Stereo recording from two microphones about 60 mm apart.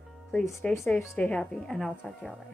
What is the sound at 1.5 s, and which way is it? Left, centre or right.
Speech, centre.